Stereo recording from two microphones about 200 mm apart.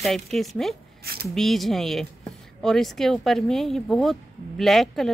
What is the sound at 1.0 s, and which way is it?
Speech, 50° right (ahead or behind).